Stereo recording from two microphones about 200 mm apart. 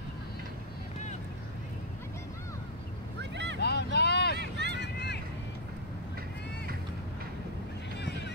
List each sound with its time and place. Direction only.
3.2 s boat: 60° right (ahead or behind)
3.5 s vehicle: 55° left (ahead or behind)
4.4 s vehicle: 60° right (ahead or behind)
4.7 s boat: 55° left (ahead or behind)
8.0 s boat: 60° left (ahead or behind)